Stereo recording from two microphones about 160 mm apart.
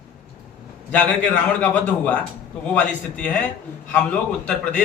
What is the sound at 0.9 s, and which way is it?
A man's voice, 10° left (ahead or behind).